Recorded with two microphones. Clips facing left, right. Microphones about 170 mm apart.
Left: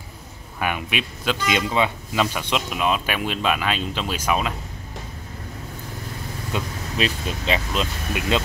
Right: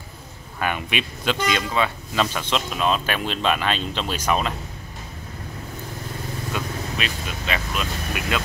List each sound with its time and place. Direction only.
0.6 s speech: 5° left (ahead or behind)
1.5 s speech: 20° left (ahead or behind)
6.5 s speech: 30° left (ahead or behind)